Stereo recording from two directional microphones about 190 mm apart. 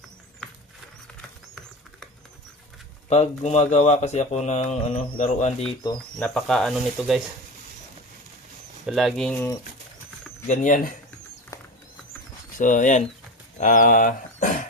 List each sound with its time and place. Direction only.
3.1 s speech: 35° left (ahead or behind)
6.1 s speech: 5° left (ahead or behind)
8.9 s speech: centre (ahead or behind)
10.4 s speech: 40° left (ahead or behind)
11.5 s a sound: 15° left (ahead or behind)
12.5 s speech: 40° left (ahead or behind)